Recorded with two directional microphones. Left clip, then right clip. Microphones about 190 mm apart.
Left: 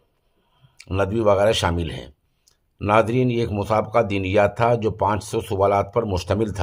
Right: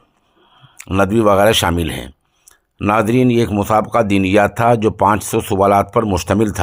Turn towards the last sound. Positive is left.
turn(degrees=-35)  # may be behind; listen again after turning